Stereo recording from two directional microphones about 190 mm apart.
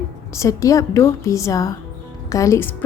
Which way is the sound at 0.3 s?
15° left (ahead or behind).